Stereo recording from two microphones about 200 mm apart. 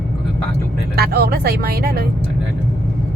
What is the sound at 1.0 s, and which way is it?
A woman's voice, 50° right (ahead or behind).